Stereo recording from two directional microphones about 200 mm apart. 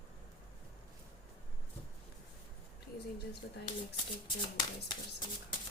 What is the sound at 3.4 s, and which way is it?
Speech, 60° left (ahead or behind).